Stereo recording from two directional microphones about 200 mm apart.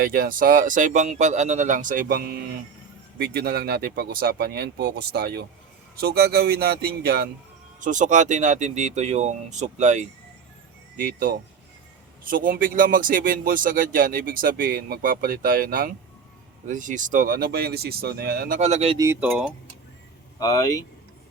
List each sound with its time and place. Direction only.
0.0 s speech: 45° right (ahead or behind)
7.8 s speech: 40° right (ahead or behind)
18.9 s speech: 15° right (ahead or behind)
20.4 s speech: 20° left (ahead or behind)